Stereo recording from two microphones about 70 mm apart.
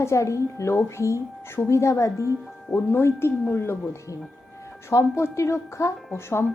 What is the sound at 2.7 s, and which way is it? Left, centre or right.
A woman's voice, left.